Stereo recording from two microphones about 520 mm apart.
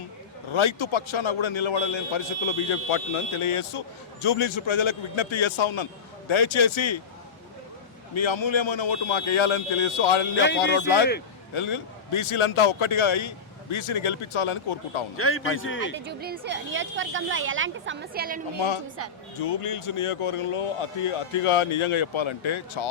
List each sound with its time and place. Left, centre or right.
0.5 s a man's voice: left
8.1 s a man's voice: left
10.4 s speech: centre
11.5 s a man's voice: left
15.1 s speech: left
16.0 s a woman's voice: centre
19.4 s speech: left